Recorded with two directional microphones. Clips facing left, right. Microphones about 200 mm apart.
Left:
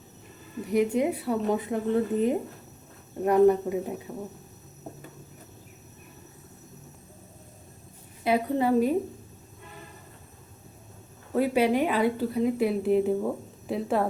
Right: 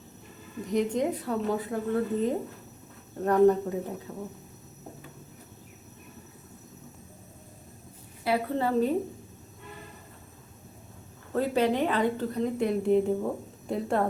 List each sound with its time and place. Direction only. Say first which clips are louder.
0.7 s a woman's voice: left 3 dB; 10° left (ahead or behind)
8.2 s a woman's voice: left 3 dB; 15° left (ahead or behind)
11.3 s a woman's voice: left 2 dB; 10° left (ahead or behind)